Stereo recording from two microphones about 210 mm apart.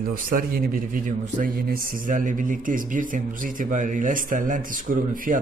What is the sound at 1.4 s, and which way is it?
A man's voice, 40° right (ahead or behind).